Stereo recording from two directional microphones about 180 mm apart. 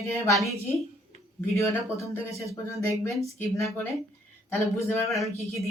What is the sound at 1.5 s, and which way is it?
Speech, 15° left (ahead or behind).